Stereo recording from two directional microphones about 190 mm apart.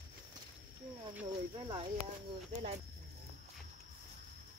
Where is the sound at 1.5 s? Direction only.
30° right (ahead or behind).